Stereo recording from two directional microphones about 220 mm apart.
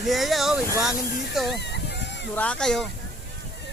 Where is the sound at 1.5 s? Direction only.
50° left (ahead or behind).